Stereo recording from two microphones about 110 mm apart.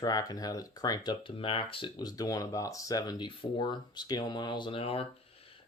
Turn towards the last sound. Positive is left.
turn(degrees=60)  # may be behind; listen again after turning